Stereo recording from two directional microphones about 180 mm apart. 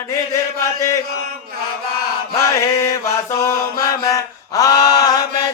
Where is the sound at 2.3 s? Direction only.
15° left (ahead or behind).